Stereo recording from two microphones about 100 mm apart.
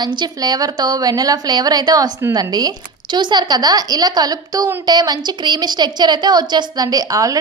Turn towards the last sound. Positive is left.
turn(degrees=-35)  # may be behind; listen again after turning